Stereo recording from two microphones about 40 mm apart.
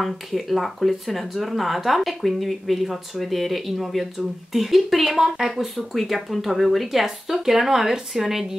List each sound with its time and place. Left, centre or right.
0.0 s speech: centre